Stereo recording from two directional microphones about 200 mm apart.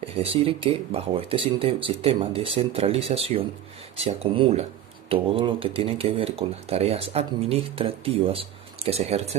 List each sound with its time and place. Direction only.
0.0 s speech: 30° right (ahead or behind)